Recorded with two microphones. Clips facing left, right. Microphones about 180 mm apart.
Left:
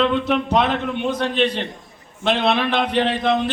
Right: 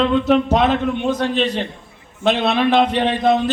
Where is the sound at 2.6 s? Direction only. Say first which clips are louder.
Right 5 dB; 45° right (ahead or behind).